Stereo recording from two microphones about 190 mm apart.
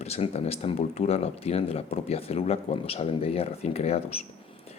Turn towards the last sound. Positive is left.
turn(degrees=30)  # may be behind; listen again after turning